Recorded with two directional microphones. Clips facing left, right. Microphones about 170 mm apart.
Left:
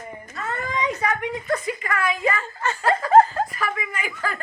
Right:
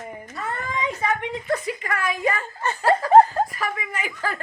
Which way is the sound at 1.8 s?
35° right (ahead or behind).